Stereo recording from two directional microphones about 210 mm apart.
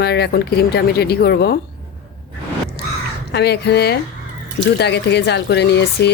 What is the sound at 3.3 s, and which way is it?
Speech, 50° left (ahead or behind).